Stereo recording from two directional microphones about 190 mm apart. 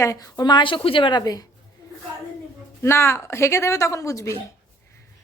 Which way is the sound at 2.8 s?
15° left (ahead or behind).